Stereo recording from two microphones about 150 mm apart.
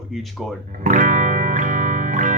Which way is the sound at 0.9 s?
55° right (ahead or behind).